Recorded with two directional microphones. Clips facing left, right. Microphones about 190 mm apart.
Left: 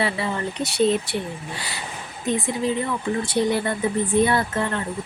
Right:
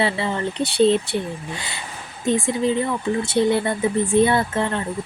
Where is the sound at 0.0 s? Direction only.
30° right (ahead or behind).